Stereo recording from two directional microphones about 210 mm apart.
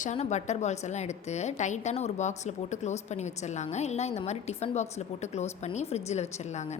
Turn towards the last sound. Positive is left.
turn(degrees=30)  # may be behind; listen again after turning